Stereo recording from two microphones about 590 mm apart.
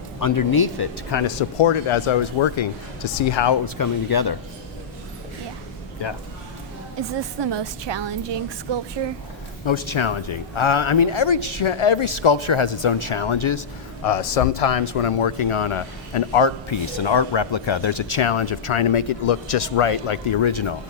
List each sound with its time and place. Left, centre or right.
0.2 s speech: left
1.6 s speech: left
6.0 s speech: left
7.5 s a woman's voice: right
9.6 s speech: left
14.1 s speech: left